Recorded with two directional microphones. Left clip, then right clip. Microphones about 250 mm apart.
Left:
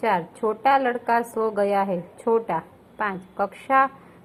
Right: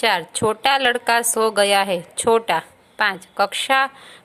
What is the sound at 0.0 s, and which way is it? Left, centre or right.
A woman's voice, right.